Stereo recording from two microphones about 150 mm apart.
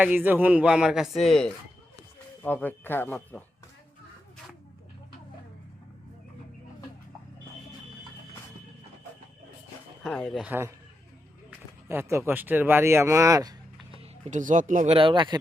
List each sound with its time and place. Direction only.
0.0 s speech: 10° right (ahead or behind); by 3.4 s 15° left (ahead or behind)
10.0 s speech: 5° left (ahead or behind)
11.9 s speech: 20° right (ahead or behind)
14.3 s speech: 55° right (ahead or behind)
14.8 s speech: 35° right (ahead or behind)